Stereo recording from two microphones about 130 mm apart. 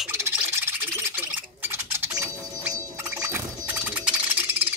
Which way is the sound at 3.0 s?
20° right (ahead or behind).